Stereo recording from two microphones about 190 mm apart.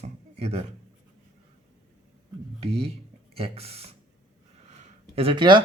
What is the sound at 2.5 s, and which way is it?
Speech, 30° right (ahead or behind).